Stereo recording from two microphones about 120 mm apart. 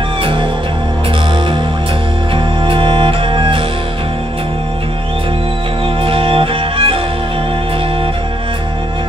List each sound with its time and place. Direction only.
0.2 s music: 45° right (ahead or behind)
2.3 s music: 50° right (ahead or behind)
6.0 s music: 50° right (ahead or behind)